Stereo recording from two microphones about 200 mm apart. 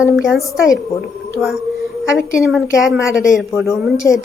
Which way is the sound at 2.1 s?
5° right (ahead or behind).